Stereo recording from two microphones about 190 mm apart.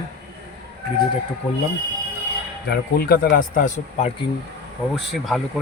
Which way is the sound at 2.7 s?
50° left (ahead or behind).